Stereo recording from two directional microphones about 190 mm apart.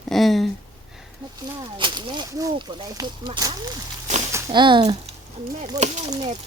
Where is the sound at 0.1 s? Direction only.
Centre (ahead or behind).